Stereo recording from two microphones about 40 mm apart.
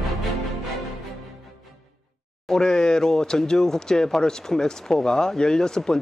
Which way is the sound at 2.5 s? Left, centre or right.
Centre.